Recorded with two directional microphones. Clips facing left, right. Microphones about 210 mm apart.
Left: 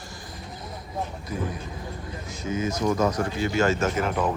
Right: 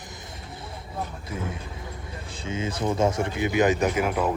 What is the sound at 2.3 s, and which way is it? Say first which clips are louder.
Speech: left 3 dB; 30° right (ahead or behind).